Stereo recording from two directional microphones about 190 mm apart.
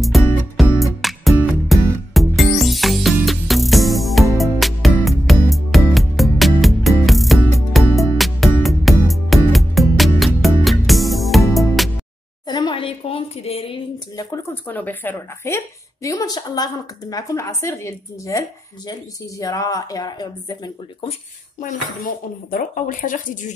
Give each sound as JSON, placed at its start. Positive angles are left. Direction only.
{"t": 0.0, "sound": "music", "side_deg": 0}
{"t": 12.4, "sound": "a sound", "side_deg": 25}
{"t": 14.3, "sound": "a woman's voice", "side_deg": 10}
{"t": 21.5, "sound": "speech", "side_deg": 45}